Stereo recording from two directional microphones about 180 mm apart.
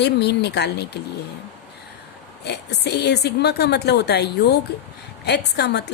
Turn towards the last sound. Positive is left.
turn(degrees=70)  # may be behind; listen again after turning